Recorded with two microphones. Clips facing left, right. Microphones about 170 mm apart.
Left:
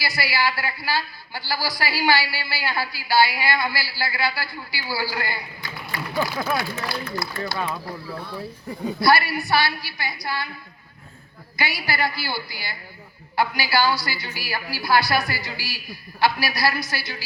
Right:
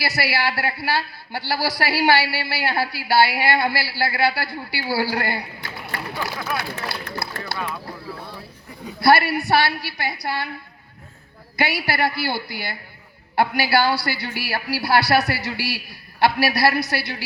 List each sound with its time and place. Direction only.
0.0 s a woman's voice: 65° right (ahead or behind)
9.0 s a woman's voice: 65° right (ahead or behind)
11.5 s a woman's voice: 65° right (ahead or behind)